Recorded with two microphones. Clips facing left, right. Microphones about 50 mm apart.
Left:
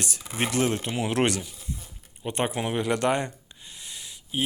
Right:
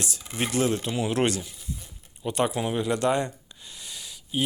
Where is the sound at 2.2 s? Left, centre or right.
Left.